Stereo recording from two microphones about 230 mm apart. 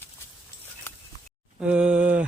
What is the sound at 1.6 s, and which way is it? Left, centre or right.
Speech, centre.